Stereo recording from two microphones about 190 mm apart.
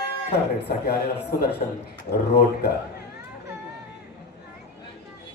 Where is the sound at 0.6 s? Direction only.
60° left (ahead or behind).